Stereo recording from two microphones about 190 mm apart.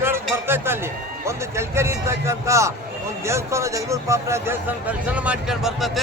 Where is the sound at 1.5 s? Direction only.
15° right (ahead or behind).